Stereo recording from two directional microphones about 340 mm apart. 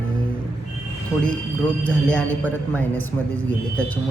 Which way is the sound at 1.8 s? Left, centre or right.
Centre.